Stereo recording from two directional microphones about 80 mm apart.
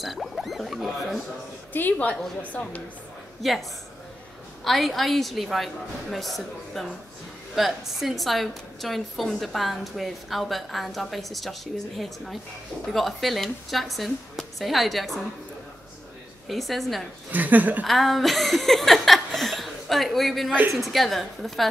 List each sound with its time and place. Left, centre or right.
0.0 s a sound: centre
1.7 s a woman's voice: left
3.4 s a woman's voice: centre
4.6 s a woman's voice: centre
16.4 s a woman's voice: centre
17.3 s speech: right
17.8 s a woman's voice: centre